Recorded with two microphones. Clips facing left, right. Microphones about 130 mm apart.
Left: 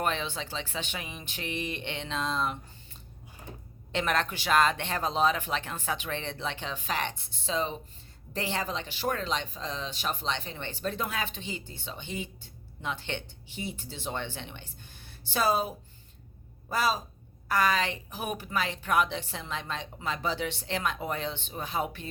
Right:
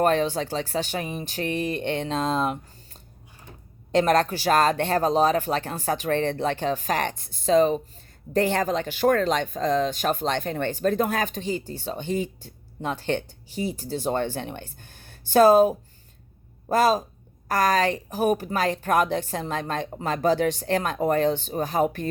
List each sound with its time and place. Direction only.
0.0 s speech: 45° right (ahead or behind)
3.5 s a sound: 15° left (ahead or behind)
3.9 s speech: 40° right (ahead or behind)